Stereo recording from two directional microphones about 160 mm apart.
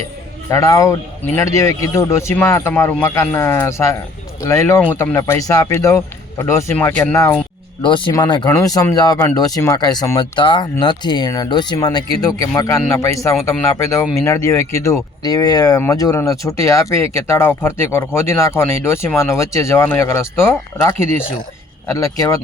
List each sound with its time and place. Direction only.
0.5 s speech: 20° left (ahead or behind)
7.8 s speech: 30° left (ahead or behind)